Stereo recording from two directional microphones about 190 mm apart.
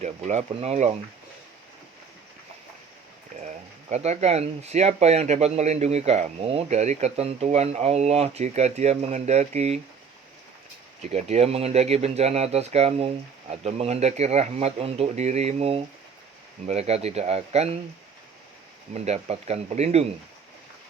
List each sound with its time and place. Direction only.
0.0 s speech: 35° right (ahead or behind)
3.4 s speech: 35° right (ahead or behind)
11.0 s speech: 35° right (ahead or behind)
18.9 s speech: 35° right (ahead or behind)